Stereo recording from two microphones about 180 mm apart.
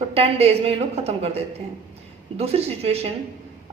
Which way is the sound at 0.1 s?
35° right (ahead or behind).